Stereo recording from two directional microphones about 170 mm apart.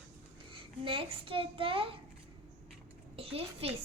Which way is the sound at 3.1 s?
35° right (ahead or behind).